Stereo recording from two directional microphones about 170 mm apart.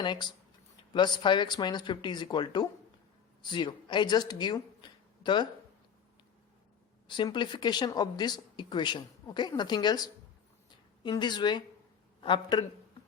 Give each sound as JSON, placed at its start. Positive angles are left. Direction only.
{"t": 0.0, "sound": "a woman's voice", "side_deg": 25}
{"t": 7.1, "sound": "speech", "side_deg": 25}
{"t": 11.0, "sound": "speech", "side_deg": 25}